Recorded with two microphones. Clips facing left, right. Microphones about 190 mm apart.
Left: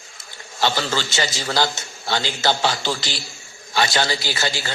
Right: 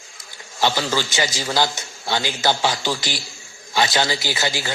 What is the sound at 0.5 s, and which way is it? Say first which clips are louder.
A man's voice: right 1 dB; 15° right (ahead or behind).